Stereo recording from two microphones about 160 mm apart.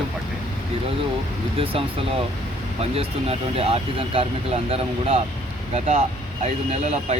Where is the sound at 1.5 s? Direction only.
35° right (ahead or behind).